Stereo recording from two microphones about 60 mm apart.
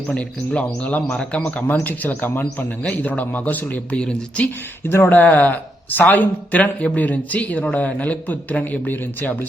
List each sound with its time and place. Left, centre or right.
0.1 s speech: left
3.9 s speech: centre
4.9 s speech: left